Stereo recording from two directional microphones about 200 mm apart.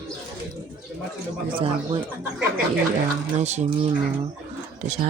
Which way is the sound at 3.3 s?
35° right (ahead or behind).